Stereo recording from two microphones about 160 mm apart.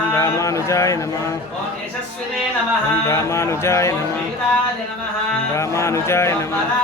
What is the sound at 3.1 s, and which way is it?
Speech, 15° left (ahead or behind).